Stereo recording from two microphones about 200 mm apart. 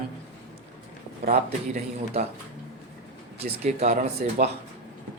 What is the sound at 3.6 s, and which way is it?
Speech, 35° right (ahead or behind).